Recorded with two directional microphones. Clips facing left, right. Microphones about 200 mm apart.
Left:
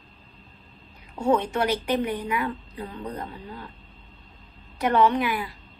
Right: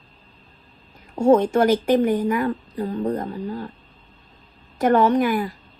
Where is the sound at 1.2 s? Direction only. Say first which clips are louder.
Right 7 dB; 45° right (ahead or behind).